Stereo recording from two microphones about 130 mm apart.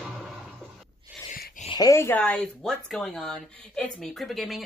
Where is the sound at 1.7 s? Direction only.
25° left (ahead or behind).